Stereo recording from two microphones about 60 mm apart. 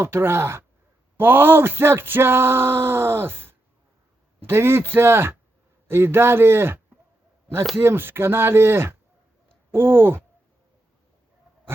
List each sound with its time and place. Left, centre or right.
0.0 s speech: right